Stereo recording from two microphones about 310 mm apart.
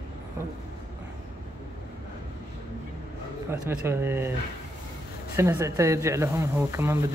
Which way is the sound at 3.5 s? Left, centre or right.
Centre.